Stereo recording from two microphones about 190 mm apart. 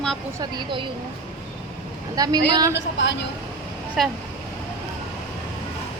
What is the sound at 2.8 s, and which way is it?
Speech, 70° left (ahead or behind).